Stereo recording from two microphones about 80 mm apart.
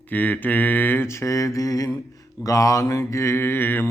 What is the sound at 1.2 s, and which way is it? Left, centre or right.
Mantra, left.